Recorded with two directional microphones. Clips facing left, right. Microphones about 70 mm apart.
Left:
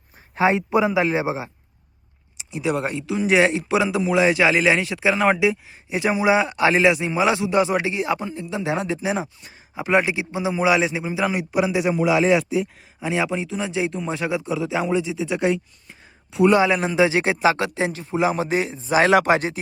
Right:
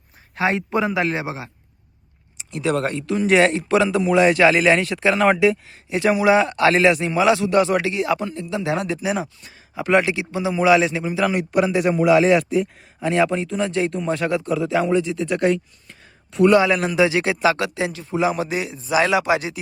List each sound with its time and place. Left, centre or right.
0.5 s a man's voice: centre
2.4 s a man's voice: centre
5.9 s a man's voice: centre
6.7 s a man's voice: centre
7.1 s speech: left
9.7 s a man's voice: centre
11.3 s a man's voice: centre
16.5 s speech: left